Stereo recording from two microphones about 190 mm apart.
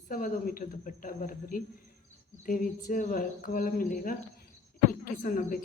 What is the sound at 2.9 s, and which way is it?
A woman's voice, 45° left (ahead or behind).